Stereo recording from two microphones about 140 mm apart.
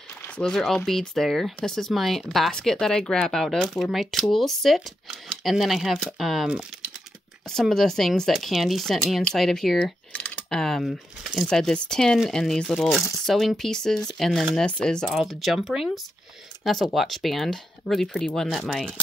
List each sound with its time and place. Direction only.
0.4 s speech: 5° left (ahead or behind)